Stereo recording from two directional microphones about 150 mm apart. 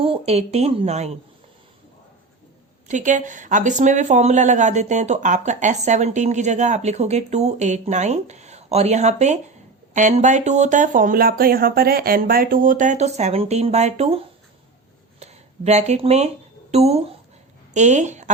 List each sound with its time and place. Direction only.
0.0 s speech: 40° right (ahead or behind)
2.8 s a woman's voice: 55° right (ahead or behind)